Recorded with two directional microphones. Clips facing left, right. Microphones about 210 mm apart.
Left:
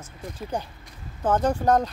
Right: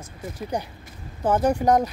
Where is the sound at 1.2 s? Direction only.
10° right (ahead or behind).